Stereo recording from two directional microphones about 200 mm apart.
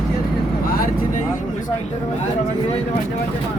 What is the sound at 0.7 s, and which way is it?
Speech, 45° left (ahead or behind).